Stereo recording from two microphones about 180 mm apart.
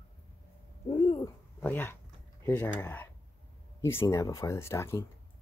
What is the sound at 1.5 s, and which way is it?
Speech, 10° left (ahead or behind).